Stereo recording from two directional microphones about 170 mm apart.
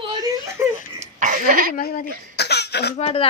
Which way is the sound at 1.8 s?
55° left (ahead or behind).